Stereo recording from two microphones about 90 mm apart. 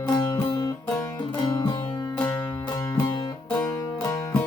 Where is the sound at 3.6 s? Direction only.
45° left (ahead or behind).